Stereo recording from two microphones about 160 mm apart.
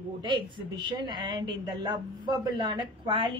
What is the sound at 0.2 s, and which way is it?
Speech, 30° right (ahead or behind).